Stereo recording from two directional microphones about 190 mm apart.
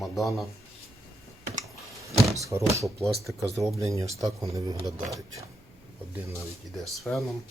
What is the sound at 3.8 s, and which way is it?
Speech, 15° right (ahead or behind).